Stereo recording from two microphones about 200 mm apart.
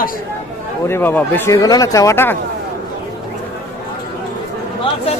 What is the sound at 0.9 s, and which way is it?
Speech, 10° left (ahead or behind).